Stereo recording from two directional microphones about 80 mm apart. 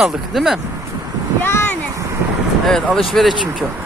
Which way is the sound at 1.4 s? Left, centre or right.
Left.